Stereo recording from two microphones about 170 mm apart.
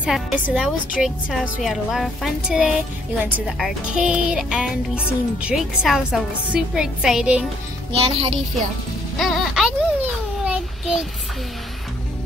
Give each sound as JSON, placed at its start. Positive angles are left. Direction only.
{"t": 0.0, "sound": "a woman's voice", "side_deg": -5}
{"t": 7.9, "sound": "speech", "side_deg": -35}
{"t": 9.2, "sound": "music", "side_deg": 0}
{"t": 10.4, "sound": "child singing", "side_deg": -5}